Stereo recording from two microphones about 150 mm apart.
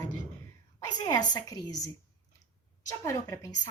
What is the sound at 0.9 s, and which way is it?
Speech, 25° left (ahead or behind).